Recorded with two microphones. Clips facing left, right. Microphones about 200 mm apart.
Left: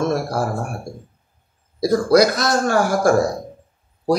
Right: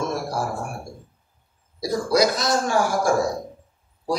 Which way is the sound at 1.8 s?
65° left (ahead or behind).